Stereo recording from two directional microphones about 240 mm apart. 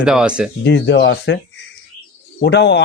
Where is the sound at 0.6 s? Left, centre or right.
Left.